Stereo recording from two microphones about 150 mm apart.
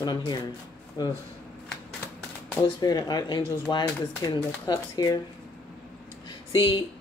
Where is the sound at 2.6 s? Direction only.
25° left (ahead or behind).